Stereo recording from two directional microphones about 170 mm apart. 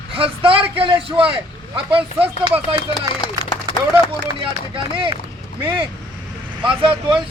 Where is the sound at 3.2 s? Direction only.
25° left (ahead or behind).